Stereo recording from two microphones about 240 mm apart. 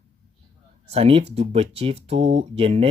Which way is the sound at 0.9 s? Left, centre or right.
Right.